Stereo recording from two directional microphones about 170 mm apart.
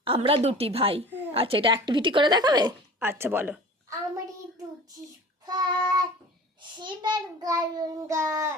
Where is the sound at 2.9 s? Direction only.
15° right (ahead or behind).